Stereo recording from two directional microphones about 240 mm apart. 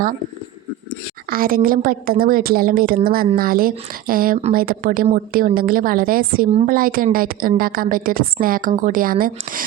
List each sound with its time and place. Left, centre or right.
1.3 s a woman's voice: right